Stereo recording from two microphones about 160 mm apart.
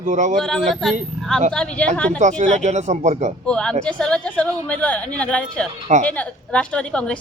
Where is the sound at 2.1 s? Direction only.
45° right (ahead or behind).